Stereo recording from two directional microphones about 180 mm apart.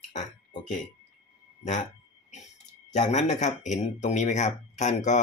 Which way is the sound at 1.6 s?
40° left (ahead or behind).